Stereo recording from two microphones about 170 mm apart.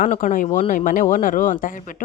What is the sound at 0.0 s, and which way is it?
A woman's voice, 50° left (ahead or behind).